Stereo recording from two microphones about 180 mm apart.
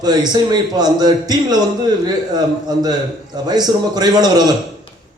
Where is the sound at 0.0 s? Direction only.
20° right (ahead or behind).